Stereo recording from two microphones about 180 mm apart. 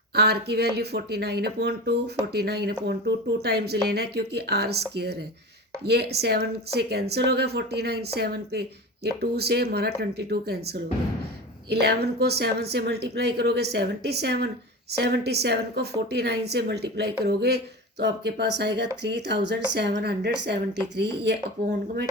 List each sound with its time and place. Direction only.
0.1 s speech: 65° right (ahead or behind)